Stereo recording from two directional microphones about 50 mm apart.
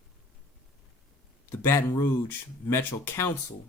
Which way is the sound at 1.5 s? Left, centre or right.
Left.